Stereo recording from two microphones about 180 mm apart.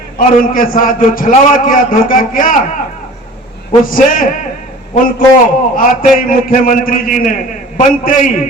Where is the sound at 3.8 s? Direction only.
50° left (ahead or behind).